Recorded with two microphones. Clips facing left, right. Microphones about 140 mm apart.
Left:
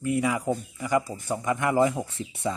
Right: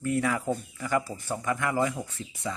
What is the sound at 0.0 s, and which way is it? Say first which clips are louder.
Speech: left 2 dB; 10° left (ahead or behind).